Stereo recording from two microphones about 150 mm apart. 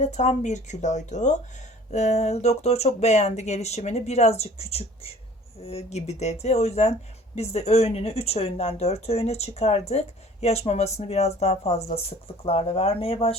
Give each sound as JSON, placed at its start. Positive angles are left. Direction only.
{"t": 0.0, "sound": "speech", "side_deg": 50}